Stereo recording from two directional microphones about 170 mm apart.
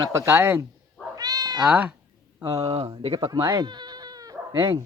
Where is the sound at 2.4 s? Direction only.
20° right (ahead or behind).